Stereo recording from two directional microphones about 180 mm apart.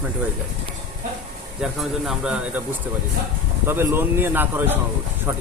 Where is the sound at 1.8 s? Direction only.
Centre (ahead or behind).